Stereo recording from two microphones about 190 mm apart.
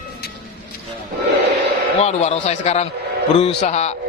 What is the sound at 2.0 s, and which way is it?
A man's voice, 35° left (ahead or behind).